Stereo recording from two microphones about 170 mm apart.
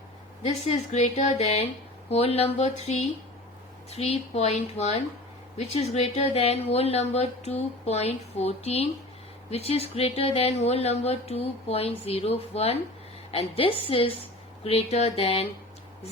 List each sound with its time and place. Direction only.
0.4 s speech: 40° left (ahead or behind)